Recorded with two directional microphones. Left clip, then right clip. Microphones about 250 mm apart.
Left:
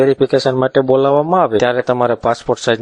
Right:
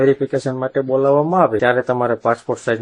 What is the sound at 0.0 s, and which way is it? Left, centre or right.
Speech, left.